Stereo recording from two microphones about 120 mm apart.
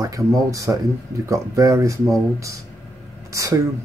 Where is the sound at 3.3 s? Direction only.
25° right (ahead or behind).